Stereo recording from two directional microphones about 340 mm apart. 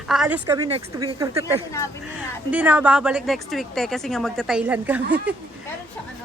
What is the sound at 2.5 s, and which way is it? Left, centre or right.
Speech, centre.